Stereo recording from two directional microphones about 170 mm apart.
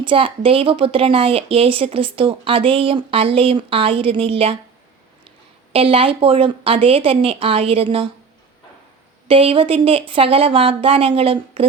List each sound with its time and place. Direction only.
0.0 s speech: 30° right (ahead or behind)
5.7 s speech: 35° right (ahead or behind)
9.2 s speech: 30° right (ahead or behind)